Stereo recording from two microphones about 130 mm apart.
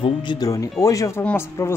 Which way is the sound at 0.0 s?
35° left (ahead or behind).